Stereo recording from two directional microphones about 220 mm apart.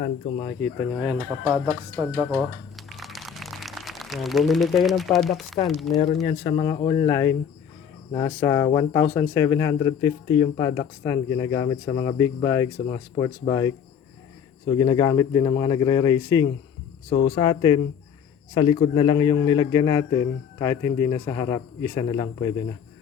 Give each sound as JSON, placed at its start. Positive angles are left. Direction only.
{"t": 1.0, "sound": "speech", "side_deg": -10}
{"t": 2.9, "sound": "a sound", "side_deg": 0}
{"t": 5.6, "sound": "speech", "side_deg": 0}
{"t": 6.2, "sound": "speech", "side_deg": 25}